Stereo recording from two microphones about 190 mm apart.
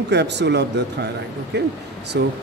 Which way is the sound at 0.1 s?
65° right (ahead or behind).